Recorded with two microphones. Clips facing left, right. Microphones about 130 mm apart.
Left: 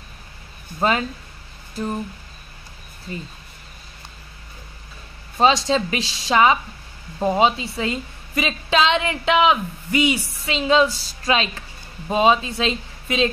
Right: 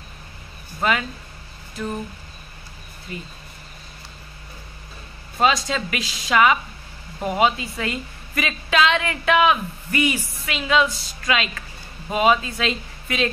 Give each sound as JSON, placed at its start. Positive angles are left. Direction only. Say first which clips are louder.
{"t": 0.7, "sound": "speech", "louder": "left 2 dB", "side_deg": 30}
{"t": 3.1, "sound": "speech", "louder": "left 2 dB", "side_deg": 35}
{"t": 5.7, "sound": "a woman's voice", "louder": "left 5 dB", "side_deg": 25}